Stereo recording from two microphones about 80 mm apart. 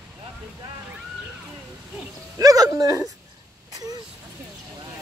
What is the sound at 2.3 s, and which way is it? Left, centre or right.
Dog, right.